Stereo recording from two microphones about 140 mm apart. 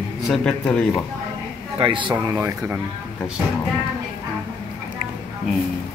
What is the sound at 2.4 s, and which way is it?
Speech, 20° right (ahead or behind).